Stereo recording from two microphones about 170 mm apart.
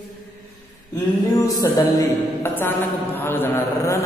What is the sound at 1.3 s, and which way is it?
A man's voice, 20° left (ahead or behind).